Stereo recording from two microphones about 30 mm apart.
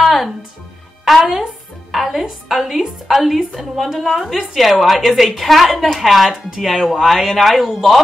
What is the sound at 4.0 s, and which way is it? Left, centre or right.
Speech, centre.